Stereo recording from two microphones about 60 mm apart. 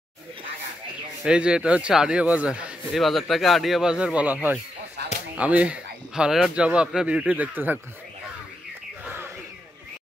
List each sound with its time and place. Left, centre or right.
1.2 s a man's voice: centre
2.9 s a man's voice: centre; by 7.4 s right
7.5 s speech: right